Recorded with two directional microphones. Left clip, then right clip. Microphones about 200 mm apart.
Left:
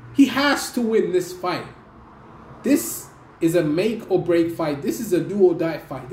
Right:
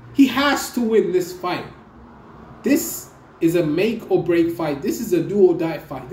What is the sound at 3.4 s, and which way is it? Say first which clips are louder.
Speech: right 1 dB; 5° left (ahead or behind).